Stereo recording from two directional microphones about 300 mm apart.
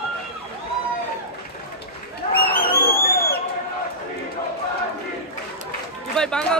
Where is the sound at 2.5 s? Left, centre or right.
Left.